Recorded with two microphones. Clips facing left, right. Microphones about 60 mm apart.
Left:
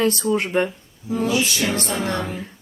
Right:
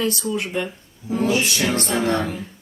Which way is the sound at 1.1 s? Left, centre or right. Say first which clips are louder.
Right 1 dB; right.